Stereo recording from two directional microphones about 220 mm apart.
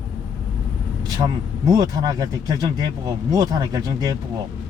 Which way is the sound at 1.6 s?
15° right (ahead or behind).